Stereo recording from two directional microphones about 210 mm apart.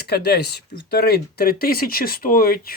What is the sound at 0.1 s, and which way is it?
Speech, 50° left (ahead or behind).